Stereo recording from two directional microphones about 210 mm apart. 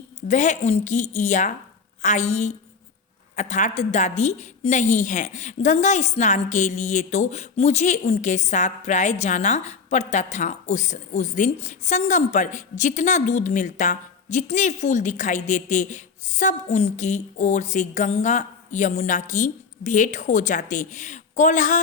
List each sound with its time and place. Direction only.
0.3 s a woman's voice: 35° left (ahead or behind)